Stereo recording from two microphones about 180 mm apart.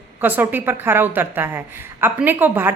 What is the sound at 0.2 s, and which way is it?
A woman's voice, 10° right (ahead or behind).